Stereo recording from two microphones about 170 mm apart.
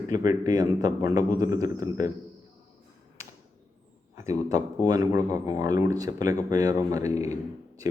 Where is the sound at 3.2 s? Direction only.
15° right (ahead or behind).